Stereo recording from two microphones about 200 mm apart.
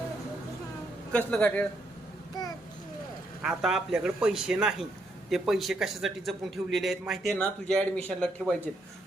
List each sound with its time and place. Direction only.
1.1 s a man's voice: 5° left (ahead or behind)
3.4 s a man's voice: centre (ahead or behind)